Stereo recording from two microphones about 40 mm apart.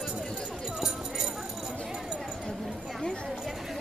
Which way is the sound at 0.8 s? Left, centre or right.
Centre.